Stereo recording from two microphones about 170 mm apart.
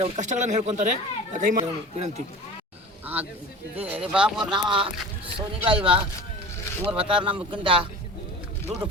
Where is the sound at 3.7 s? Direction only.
10° right (ahead or behind).